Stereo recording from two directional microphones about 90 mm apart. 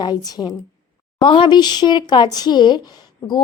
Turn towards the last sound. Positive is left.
turn(degrees=50)  # may be behind; listen again after turning